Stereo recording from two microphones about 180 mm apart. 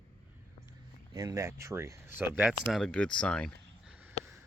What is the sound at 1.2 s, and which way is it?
Speech, 15° right (ahead or behind).